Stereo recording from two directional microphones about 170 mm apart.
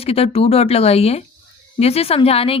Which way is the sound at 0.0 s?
35° left (ahead or behind).